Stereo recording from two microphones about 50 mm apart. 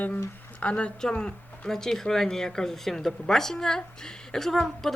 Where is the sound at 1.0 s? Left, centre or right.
Centre.